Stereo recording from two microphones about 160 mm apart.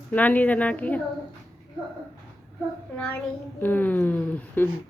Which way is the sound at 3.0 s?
10° left (ahead or behind).